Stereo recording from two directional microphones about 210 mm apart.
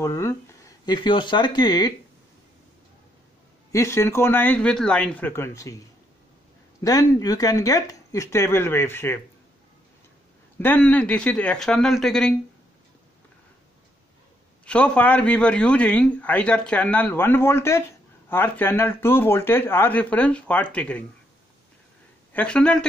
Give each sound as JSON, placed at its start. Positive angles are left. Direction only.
{"t": 0.0, "sound": "speech", "side_deg": 15}
{"t": 3.7, "sound": "a man's voice", "side_deg": 15}
{"t": 6.8, "sound": "a man's voice", "side_deg": 15}
{"t": 10.6, "sound": "speech", "side_deg": 10}
{"t": 14.6, "sound": "a man's voice", "side_deg": 5}
{"t": 22.3, "sound": "speech", "side_deg": 5}